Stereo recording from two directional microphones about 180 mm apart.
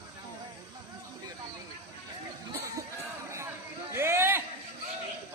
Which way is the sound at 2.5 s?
15° right (ahead or behind).